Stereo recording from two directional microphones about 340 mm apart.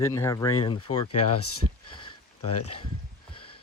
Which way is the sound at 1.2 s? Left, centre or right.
Left.